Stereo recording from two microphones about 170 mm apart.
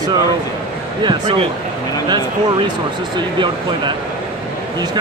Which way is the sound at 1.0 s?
30° right (ahead or behind).